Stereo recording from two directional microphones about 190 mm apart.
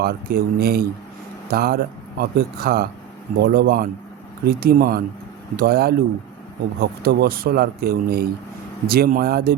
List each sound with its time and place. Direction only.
0.0 s speech: 55° right (ahead or behind)